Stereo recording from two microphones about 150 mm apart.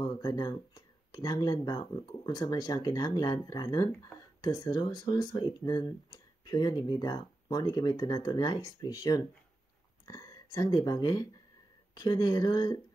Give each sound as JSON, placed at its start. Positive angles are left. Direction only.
{"t": 0.0, "sound": "speech", "side_deg": 25}